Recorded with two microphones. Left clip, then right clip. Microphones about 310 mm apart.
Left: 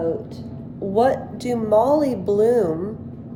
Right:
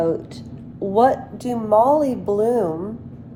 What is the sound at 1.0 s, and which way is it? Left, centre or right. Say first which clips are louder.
A woman's voice: right 2 dB; centre.